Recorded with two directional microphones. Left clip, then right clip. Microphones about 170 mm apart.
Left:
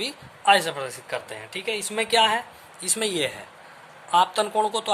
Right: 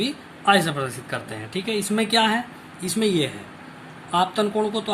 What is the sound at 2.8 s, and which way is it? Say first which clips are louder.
Speech: right 3 dB; 35° left (ahead or behind).